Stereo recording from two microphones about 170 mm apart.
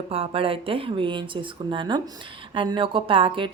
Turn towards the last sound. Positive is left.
turn(degrees=-30)  # may be behind; listen again after turning